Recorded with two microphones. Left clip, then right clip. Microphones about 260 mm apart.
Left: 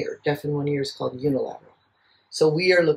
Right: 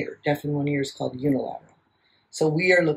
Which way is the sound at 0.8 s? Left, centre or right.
Left.